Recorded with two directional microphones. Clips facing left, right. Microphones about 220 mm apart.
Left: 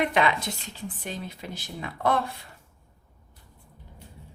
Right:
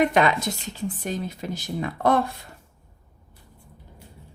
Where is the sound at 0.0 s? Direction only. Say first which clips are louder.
Right 4 dB; 45° right (ahead or behind).